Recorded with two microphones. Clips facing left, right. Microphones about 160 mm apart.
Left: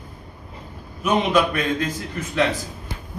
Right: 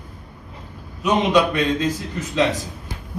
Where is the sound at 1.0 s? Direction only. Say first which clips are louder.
Right 2 dB; 20° right (ahead or behind).